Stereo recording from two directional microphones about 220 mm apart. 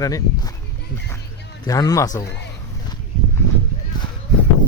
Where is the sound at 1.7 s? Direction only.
15° left (ahead or behind).